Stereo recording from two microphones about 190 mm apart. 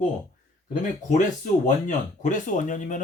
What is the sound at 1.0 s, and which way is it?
Speech, 40° left (ahead or behind).